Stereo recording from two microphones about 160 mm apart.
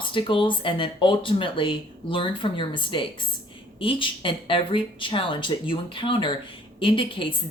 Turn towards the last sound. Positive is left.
turn(degrees=35)  # may be behind; listen again after turning